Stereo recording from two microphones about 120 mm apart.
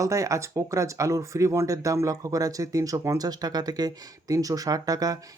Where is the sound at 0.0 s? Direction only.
25° right (ahead or behind).